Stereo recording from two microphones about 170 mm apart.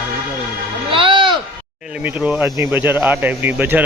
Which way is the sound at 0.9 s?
30° right (ahead or behind).